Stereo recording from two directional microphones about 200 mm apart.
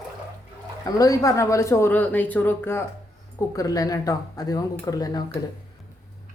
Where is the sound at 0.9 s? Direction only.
15° left (ahead or behind).